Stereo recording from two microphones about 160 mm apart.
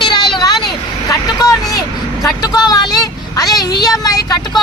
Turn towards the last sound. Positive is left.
turn(degrees=25)  # may be behind; listen again after turning